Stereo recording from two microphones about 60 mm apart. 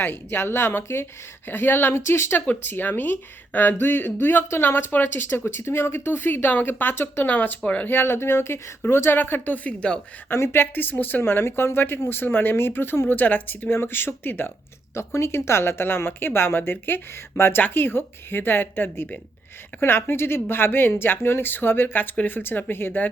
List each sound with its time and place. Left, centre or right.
0.0 s speech: left
2.5 s speech: left
9.6 s speech: centre
10.2 s speech: left
11.2 s speech: left
13.7 s speech: left
14.9 s speech: left